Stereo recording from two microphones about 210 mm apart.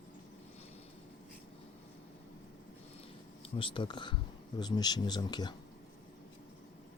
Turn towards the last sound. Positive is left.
turn(degrees=20)  # may be behind; listen again after turning